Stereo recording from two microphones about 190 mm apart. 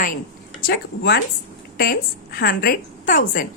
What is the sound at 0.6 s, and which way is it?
A woman's voice, 55° left (ahead or behind).